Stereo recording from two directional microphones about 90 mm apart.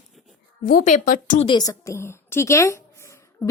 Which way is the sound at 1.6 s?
40° left (ahead or behind).